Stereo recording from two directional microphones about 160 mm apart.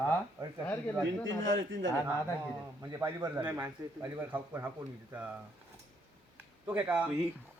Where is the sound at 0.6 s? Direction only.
10° left (ahead or behind).